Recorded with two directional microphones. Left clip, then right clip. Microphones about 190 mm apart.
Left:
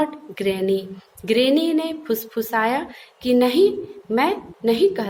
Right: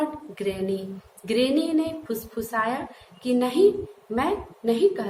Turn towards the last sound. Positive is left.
turn(degrees=50)  # may be behind; listen again after turning